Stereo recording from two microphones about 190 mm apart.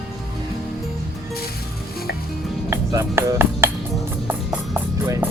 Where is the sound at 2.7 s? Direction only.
15° right (ahead or behind).